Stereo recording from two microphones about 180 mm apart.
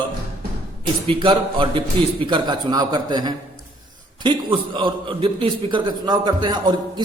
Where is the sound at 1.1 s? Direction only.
30° right (ahead or behind).